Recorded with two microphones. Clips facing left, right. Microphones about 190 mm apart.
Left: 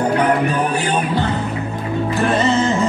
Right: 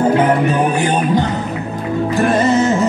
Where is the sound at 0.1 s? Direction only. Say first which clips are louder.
Right 3 dB; 20° right (ahead or behind).